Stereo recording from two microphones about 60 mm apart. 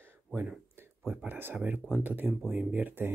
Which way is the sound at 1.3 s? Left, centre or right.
Right.